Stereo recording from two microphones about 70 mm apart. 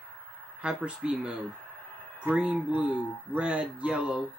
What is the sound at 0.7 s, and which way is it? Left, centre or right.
Speech, centre.